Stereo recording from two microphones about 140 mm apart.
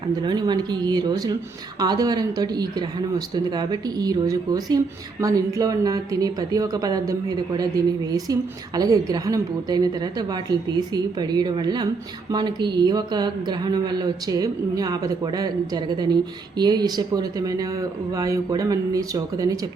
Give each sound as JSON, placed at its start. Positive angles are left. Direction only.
{"t": 0.2, "sound": "a woman's voice", "side_deg": -30}